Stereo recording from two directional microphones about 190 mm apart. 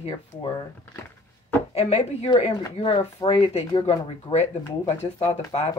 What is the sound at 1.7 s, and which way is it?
Speech, 35° left (ahead or behind).